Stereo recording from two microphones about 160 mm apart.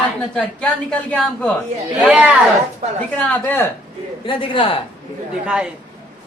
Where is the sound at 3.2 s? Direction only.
10° left (ahead or behind).